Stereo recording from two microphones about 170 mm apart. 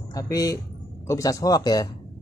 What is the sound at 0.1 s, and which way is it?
Speech, 20° left (ahead or behind).